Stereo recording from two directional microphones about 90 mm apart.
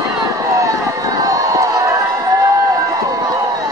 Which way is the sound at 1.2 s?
40° right (ahead or behind).